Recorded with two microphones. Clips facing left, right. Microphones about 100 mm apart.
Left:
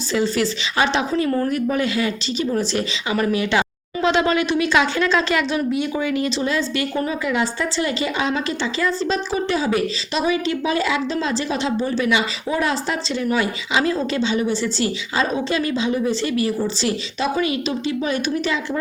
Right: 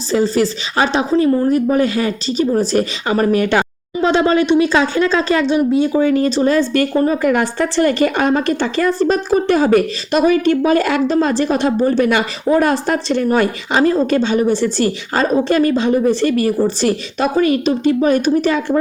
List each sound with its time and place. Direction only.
0.1 s speech: 40° right (ahead or behind)
1.1 s a woman's voice: 20° right (ahead or behind)
1.5 s speech: 35° right (ahead or behind)